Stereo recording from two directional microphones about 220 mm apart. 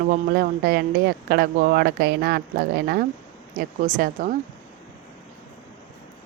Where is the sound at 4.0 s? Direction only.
35° right (ahead or behind).